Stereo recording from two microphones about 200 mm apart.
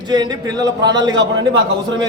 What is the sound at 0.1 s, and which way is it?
A man's voice, 20° right (ahead or behind).